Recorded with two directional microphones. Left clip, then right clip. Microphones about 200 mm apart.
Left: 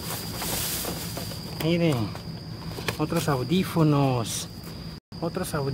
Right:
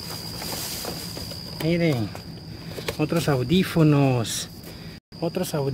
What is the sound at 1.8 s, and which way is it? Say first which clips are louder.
Speech: right 1 dB; 30° right (ahead or behind).